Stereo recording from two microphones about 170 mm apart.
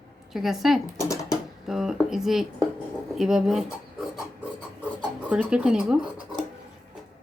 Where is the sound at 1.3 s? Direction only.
Centre (ahead or behind).